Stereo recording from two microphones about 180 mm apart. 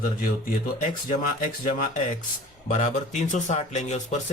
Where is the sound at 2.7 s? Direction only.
40° left (ahead or behind).